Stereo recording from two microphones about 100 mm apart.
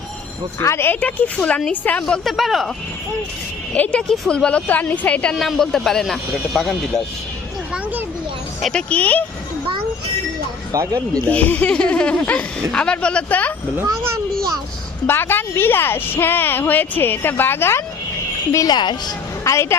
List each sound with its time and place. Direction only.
0.6 s a woman's voice: 25° left (ahead or behind)
0.9 s a woman's voice: 10° left (ahead or behind)
2.0 s a man's voice: 5° left (ahead or behind)
3.7 s a woman's voice: 10° left (ahead or behind)
5.3 s a man's voice: 5° left (ahead or behind)
8.6 s a woman's voice: 10° left (ahead or behind)
10.7 s speech: 35° right (ahead or behind)
11.3 s a woman's voice: 15° left (ahead or behind)
15.0 s a woman's voice: 20° left (ahead or behind)
18.5 s speech: 35° left (ahead or behind)
18.8 s speech: 50° left (ahead or behind)
19.5 s a woman's voice: 25° left (ahead or behind)